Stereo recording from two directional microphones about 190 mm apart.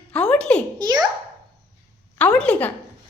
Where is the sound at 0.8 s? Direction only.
20° right (ahead or behind).